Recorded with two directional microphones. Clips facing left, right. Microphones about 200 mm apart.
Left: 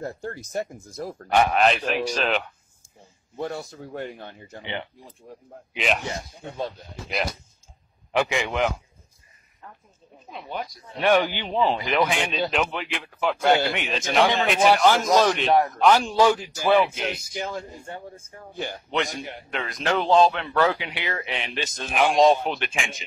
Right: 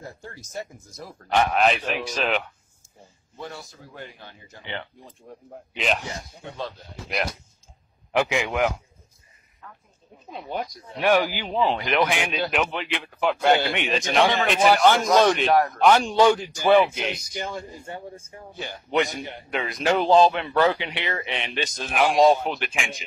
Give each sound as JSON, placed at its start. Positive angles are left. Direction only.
{"t": 0.0, "sound": "speech", "side_deg": 60}
{"t": 1.3, "sound": "speech", "side_deg": 0}
{"t": 3.5, "sound": "speech", "side_deg": 60}
{"t": 5.3, "sound": "speech", "side_deg": 5}
{"t": 7.1, "sound": "speech", "side_deg": 0}
{"t": 11.0, "sound": "speech", "side_deg": -5}
{"t": 18.9, "sound": "speech", "side_deg": 0}
{"t": 19.6, "sound": "speech", "side_deg": -10}